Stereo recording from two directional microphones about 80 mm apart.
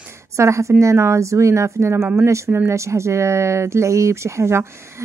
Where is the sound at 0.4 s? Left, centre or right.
Right.